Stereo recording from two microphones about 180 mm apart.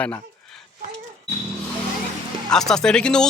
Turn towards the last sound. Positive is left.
turn(degrees=5)  # may be behind; listen again after turning